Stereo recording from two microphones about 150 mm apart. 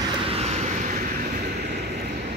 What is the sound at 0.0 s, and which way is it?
Vehicle, 40° right (ahead or behind).